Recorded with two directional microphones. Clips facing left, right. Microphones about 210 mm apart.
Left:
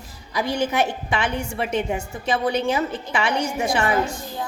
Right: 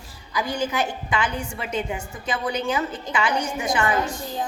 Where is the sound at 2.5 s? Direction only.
25° left (ahead or behind).